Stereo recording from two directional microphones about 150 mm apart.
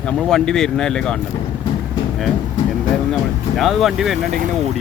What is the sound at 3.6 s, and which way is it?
Speech, centre (ahead or behind).